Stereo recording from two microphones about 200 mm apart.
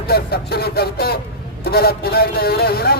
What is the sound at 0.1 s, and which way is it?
A man's voice, 50° left (ahead or behind).